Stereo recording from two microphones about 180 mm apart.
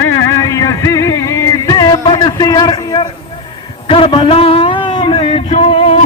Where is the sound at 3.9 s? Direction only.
30° left (ahead or behind).